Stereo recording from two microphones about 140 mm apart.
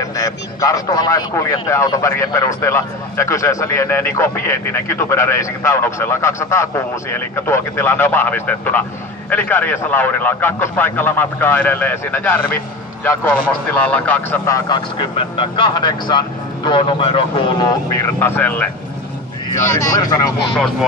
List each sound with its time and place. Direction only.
0.1 s a man's voice: 25° left (ahead or behind)
19.8 s a man's voice: 25° left (ahead or behind)